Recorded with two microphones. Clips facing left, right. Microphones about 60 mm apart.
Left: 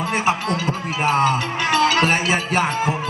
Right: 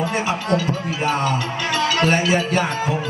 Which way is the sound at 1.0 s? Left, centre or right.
Left.